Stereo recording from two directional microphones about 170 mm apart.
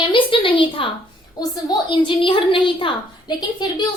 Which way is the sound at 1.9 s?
30° left (ahead or behind).